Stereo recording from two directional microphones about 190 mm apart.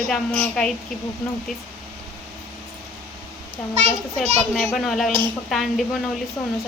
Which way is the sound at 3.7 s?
35° right (ahead or behind).